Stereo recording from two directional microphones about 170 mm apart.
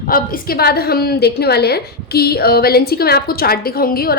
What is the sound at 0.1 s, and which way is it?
A woman's voice, 55° left (ahead or behind).